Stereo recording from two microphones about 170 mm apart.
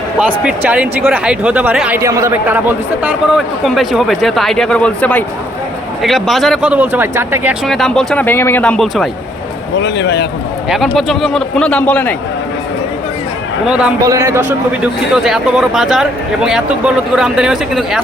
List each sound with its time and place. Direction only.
0.4 s a man's voice: 10° right (ahead or behind)
7.7 s a man's voice: centre (ahead or behind)
9.7 s a man's voice: 90° left
10.7 s a man's voice: centre (ahead or behind)
13.7 s a man's voice: 5° right (ahead or behind)
14.0 s a man's voice: 20° right (ahead or behind)
14.8 s a man's voice: 5° right (ahead or behind)